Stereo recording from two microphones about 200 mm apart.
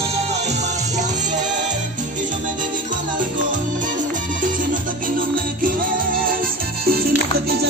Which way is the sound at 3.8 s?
40° right (ahead or behind).